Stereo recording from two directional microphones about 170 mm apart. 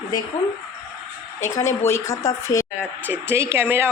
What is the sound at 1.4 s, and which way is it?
A woman's voice, 15° left (ahead or behind).